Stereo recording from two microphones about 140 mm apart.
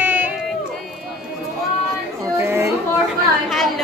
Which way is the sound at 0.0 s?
10° right (ahead or behind).